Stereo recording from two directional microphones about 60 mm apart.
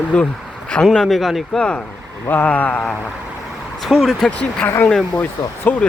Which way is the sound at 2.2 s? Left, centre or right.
Left.